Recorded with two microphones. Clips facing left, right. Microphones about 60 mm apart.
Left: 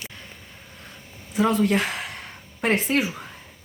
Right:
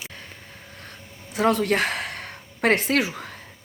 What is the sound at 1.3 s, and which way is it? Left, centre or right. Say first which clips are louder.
Speech: even; right.